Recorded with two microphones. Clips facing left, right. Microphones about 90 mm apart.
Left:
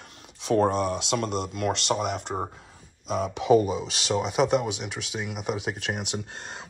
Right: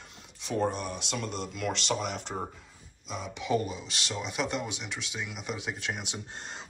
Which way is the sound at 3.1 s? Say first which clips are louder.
Left 10 dB; 75° left (ahead or behind).